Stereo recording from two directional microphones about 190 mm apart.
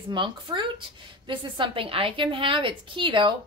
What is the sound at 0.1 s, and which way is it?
A woman's voice, 25° right (ahead or behind).